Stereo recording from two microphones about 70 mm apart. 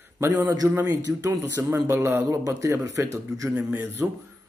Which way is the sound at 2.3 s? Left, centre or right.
Right.